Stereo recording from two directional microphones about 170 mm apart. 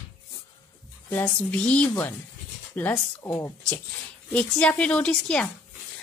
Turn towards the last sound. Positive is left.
turn(degrees=5)  # may be behind; listen again after turning